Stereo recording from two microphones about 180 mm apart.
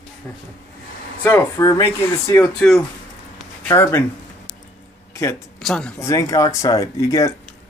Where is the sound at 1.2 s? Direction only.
15° left (ahead or behind).